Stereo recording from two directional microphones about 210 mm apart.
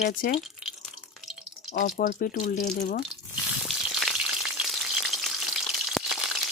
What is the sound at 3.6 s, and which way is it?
Frying, centre (ahead or behind).